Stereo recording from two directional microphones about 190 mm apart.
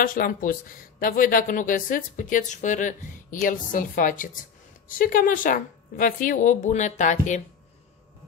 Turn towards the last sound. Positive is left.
turn(degrees=40)  # may be behind; listen again after turning